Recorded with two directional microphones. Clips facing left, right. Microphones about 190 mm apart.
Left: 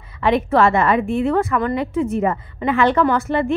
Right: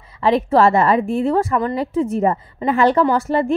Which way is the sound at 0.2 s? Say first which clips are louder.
Right 1 dB; 35° right (ahead or behind).